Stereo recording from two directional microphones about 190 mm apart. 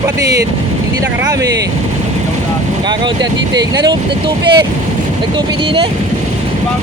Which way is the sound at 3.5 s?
20° right (ahead or behind).